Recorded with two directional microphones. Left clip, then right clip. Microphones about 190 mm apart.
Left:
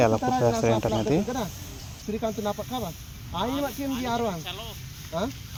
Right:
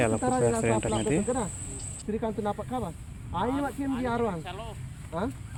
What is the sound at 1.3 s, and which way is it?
Speech, 35° left (ahead or behind).